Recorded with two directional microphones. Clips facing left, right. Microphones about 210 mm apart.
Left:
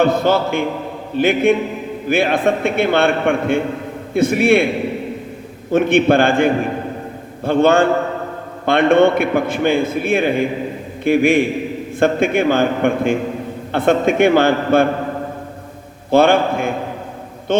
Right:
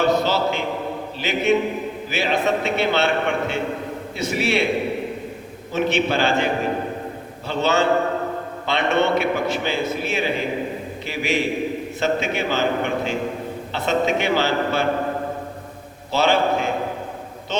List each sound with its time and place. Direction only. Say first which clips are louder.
0.0 s a man's voice: left 4 dB; 55° left (ahead or behind)
5.7 s a man's voice: left 8 dB; 55° left (ahead or behind)
16.1 s a man's voice: left 6 dB; 55° left (ahead or behind)